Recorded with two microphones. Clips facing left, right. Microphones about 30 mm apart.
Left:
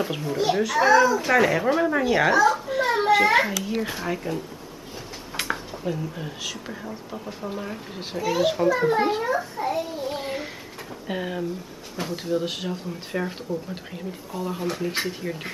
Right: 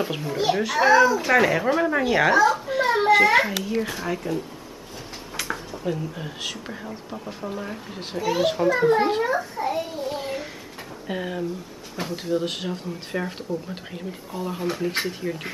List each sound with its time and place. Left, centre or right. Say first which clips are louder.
0.0 s speech: even; centre
2.6 s a sound: right 2 dB; centre
3.8 s speech: even; centre
5.3 s a sound: left 2 dB; centre
5.9 s speech: right 1 dB; centre
9.6 s child singing: even; centre
10.0 s child singing: even; centre
11.1 s speech: even; centre